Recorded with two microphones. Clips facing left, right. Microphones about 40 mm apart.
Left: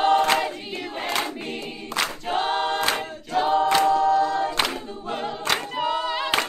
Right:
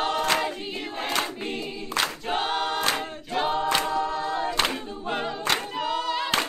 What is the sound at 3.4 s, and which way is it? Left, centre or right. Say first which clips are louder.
Choir: left 6 dB; centre.